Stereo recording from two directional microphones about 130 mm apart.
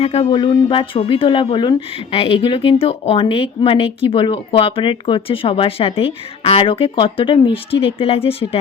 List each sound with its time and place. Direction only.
0.0 s speech: 50° left (ahead or behind)
0.3 s speech: 40° left (ahead or behind)